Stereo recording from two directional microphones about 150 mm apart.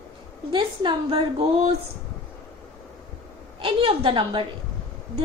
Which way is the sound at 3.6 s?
35° right (ahead or behind).